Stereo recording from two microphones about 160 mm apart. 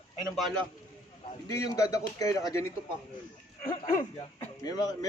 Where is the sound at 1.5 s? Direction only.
20° left (ahead or behind).